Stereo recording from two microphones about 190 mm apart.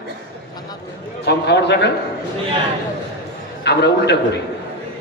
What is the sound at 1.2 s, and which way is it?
Speech, 65° left (ahead or behind).